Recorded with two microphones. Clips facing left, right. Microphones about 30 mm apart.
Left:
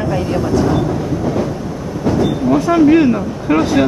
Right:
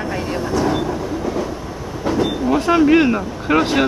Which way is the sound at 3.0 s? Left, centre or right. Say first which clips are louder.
Left 3 dB; right.